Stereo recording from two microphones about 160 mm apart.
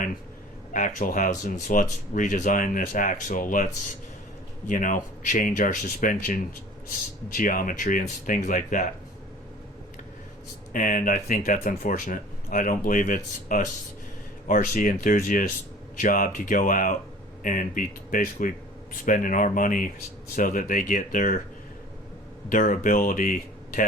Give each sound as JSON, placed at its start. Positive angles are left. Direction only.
{"t": 0.7, "sound": "speech", "side_deg": 55}
{"t": 7.3, "sound": "speech", "side_deg": 60}
{"t": 10.7, "sound": "speech", "side_deg": 55}
{"t": 22.4, "sound": "speech", "side_deg": 55}